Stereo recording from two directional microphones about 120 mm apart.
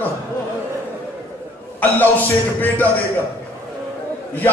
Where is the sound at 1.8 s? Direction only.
15° left (ahead or behind).